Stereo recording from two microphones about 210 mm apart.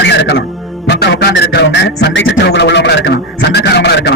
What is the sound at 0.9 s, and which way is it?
Music, 55° left (ahead or behind).